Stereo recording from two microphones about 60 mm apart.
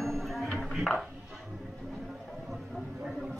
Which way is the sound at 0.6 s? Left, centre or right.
Centre.